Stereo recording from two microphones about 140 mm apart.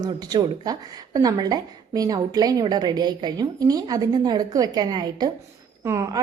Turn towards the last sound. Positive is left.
turn(degrees=-20)  # may be behind; listen again after turning